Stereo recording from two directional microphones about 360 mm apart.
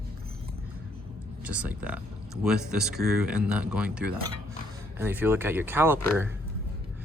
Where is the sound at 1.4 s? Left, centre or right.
Centre.